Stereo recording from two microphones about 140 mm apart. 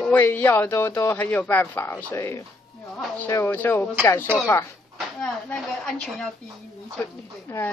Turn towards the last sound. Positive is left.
turn(degrees=15)  # may be behind; listen again after turning